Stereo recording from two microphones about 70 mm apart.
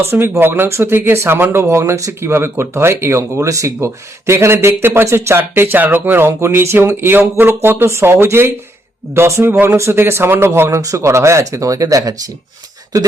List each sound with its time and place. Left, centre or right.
0.1 s speech: right
10.8 s speech: right